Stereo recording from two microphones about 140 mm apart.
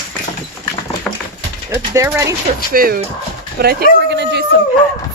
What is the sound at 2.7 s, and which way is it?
Speech, 90° right.